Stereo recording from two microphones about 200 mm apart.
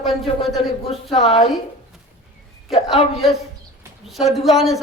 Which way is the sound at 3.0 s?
30° left (ahead or behind).